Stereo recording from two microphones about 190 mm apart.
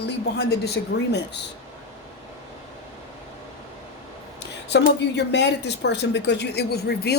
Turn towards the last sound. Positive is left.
turn(degrees=60)  # may be behind; listen again after turning